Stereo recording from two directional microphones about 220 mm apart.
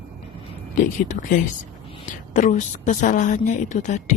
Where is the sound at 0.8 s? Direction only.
35° left (ahead or behind).